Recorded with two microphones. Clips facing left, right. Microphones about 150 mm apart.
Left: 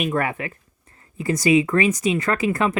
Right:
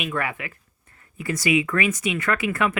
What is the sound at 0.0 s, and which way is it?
Speech, 40° left (ahead or behind).